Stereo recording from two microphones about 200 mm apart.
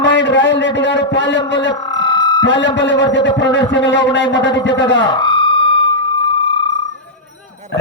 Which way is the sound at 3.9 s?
60° left (ahead or behind).